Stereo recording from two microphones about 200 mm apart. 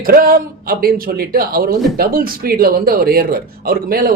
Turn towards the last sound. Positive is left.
turn(degrees=-50)  # may be behind; listen again after turning